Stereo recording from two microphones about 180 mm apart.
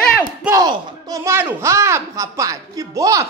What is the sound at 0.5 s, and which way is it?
Speech, 20° right (ahead or behind).